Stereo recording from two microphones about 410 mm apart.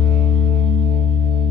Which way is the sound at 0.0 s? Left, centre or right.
Centre.